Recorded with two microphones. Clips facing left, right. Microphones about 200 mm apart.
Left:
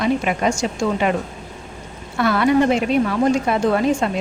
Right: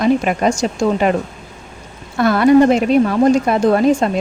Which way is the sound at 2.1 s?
40° right (ahead or behind).